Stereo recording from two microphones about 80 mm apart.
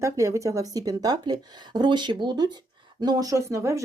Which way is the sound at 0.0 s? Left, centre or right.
Right.